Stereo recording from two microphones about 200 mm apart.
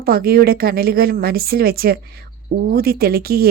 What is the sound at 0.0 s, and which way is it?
A woman's voice, 50° right (ahead or behind).